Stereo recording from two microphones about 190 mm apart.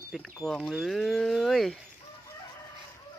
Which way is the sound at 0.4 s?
Centre (ahead or behind).